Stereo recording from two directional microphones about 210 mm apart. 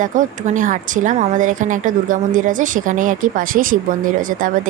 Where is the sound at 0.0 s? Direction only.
35° right (ahead or behind).